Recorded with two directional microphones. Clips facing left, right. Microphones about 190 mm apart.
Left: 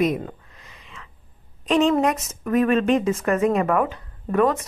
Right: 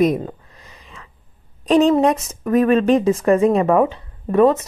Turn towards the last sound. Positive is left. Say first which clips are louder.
# right 6 dB
turn(degrees=-25)  # may be behind; listen again after turning